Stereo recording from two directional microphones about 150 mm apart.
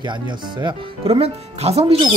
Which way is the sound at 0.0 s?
30° right (ahead or behind).